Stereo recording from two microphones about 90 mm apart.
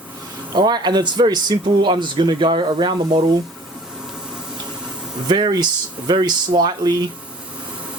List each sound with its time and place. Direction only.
0.5 s speech: 50° right (ahead or behind)
5.3 s speech: 55° right (ahead or behind)